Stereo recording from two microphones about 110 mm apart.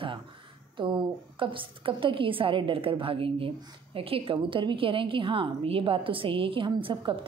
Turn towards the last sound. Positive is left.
turn(degrees=-50)  # may be behind; listen again after turning